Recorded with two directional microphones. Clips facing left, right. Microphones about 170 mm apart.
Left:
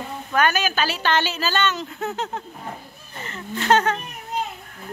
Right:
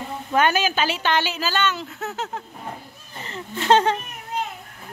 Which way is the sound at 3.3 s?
25° right (ahead or behind).